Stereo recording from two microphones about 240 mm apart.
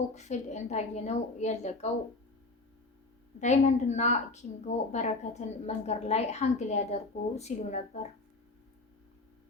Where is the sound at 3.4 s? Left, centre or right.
Left.